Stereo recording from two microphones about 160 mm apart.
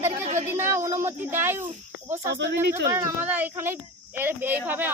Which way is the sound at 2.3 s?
90° right.